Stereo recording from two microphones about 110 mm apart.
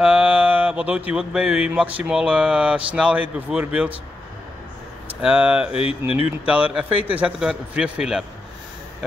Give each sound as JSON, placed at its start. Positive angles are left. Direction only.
{"t": 0.0, "sound": "speech", "side_deg": -10}
{"t": 5.2, "sound": "speech", "side_deg": -10}
{"t": 5.8, "sound": "speech", "side_deg": 60}
{"t": 6.1, "sound": "speech", "side_deg": -10}